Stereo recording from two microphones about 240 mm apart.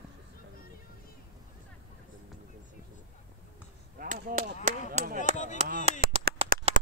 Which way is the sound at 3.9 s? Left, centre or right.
Right.